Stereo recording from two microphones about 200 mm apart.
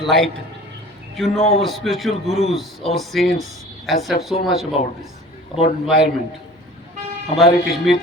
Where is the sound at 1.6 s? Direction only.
Centre (ahead or behind).